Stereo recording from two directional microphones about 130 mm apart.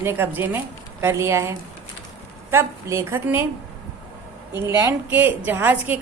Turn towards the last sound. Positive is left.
turn(degrees=-15)  # may be behind; listen again after turning